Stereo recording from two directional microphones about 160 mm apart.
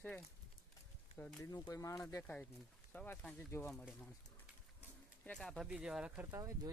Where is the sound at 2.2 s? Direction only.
10° left (ahead or behind).